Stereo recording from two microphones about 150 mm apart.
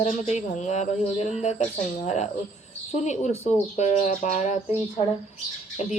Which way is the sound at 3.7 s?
50° left (ahead or behind).